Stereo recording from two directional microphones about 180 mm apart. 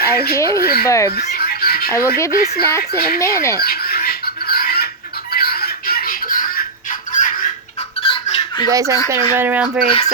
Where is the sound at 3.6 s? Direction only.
55° left (ahead or behind).